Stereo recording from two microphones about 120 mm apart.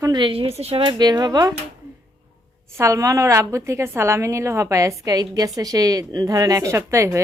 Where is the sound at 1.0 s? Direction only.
35° right (ahead or behind).